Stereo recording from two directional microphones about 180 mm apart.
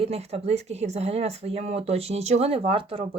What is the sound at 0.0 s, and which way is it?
Speech, 35° right (ahead or behind).